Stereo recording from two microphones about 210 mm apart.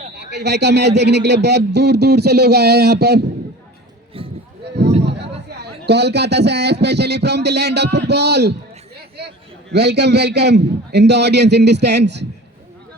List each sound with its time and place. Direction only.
0.2 s speech: 55° right (ahead or behind)
4.1 s a sound: 25° right (ahead or behind)
5.0 s a sound: 55° right (ahead or behind)
5.5 s speech: 50° right (ahead or behind)
9.0 s chatter: 50° right (ahead or behind)
9.7 s speech: 50° right (ahead or behind)